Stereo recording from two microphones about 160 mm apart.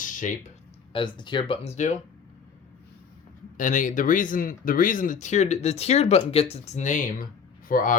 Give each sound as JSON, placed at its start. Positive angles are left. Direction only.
{"t": 0.0, "sound": "a sound", "side_deg": 50}
{"t": 0.9, "sound": "speech", "side_deg": 30}
{"t": 3.6, "sound": "speech", "side_deg": 55}